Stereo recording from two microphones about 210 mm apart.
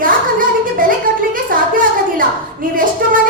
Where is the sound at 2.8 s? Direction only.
40° right (ahead or behind).